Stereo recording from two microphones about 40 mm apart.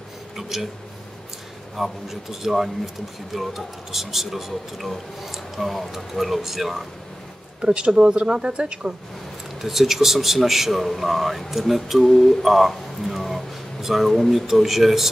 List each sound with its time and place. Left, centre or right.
0.4 s a sound: centre
1.8 s speech: centre
7.6 s speech: right
9.6 s a man's voice: centre